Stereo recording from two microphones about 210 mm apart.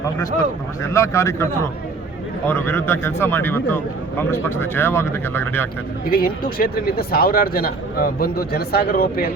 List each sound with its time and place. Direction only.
0.8 s speech: 15° left (ahead or behind)
2.5 s speech: 10° left (ahead or behind)
6.1 s speech: 45° left (ahead or behind)